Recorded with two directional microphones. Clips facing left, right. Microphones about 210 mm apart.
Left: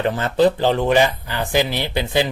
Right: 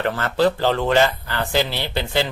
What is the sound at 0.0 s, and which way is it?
Speech, 20° left (ahead or behind).